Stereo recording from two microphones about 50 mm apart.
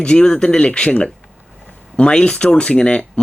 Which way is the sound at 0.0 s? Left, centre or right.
Centre.